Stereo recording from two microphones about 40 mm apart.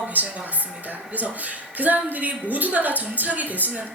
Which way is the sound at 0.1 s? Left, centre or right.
Right.